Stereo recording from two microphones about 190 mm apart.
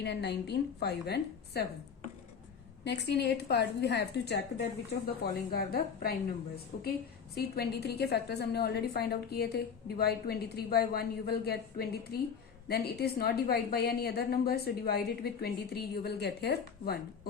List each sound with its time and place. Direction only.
0.0 s a woman's voice: 60° left (ahead or behind)
2.8 s a woman's voice: 60° left (ahead or behind)